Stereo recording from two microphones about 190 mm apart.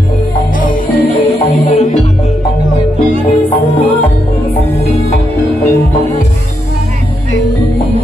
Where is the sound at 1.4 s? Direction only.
35° left (ahead or behind).